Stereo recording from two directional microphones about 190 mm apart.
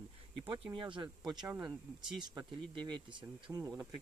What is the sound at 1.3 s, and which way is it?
Speech, 15° right (ahead or behind).